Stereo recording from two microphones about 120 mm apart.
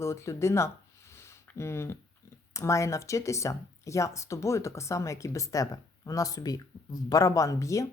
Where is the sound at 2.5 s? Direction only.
25° left (ahead or behind).